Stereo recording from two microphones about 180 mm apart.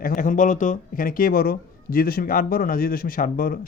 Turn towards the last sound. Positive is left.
turn(degrees=50)  # may be behind; listen again after turning